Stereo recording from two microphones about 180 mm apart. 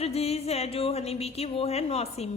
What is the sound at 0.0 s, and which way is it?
A woman's voice, 35° left (ahead or behind).